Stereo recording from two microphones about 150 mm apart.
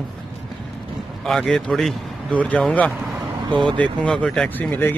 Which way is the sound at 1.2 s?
5° left (ahead or behind).